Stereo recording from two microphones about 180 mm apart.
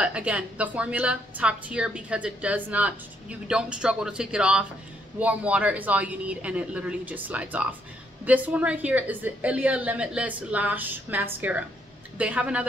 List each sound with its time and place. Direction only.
0.0 s a woman's voice: 5° right (ahead or behind)